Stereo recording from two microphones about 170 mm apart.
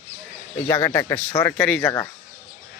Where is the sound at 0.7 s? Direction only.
15° left (ahead or behind).